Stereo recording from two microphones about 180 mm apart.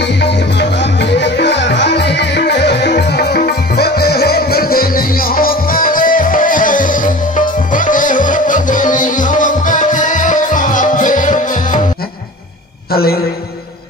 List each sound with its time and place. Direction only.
0.0 s music: 70° left (ahead or behind); by 11.8 s 45° left (ahead or behind)
12.9 s a man's voice: 60° left (ahead or behind)